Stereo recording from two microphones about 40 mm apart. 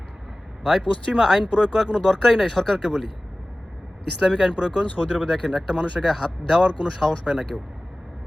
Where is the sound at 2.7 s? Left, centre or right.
Centre.